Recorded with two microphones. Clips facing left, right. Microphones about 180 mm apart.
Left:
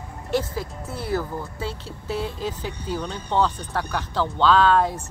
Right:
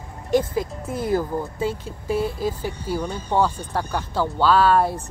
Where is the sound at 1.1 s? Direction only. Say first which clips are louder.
Right 4 dB; 15° right (ahead or behind).